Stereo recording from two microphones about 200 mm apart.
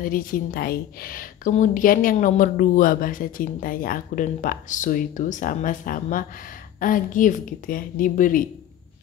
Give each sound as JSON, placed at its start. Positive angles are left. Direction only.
{"t": 0.0, "sound": "a woman's voice", "side_deg": 45}